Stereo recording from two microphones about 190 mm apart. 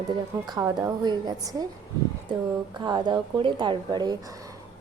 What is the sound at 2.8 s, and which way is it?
A woman's voice, 20° right (ahead or behind).